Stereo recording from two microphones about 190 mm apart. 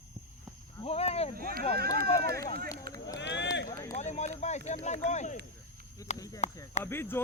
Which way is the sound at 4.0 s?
35° left (ahead or behind).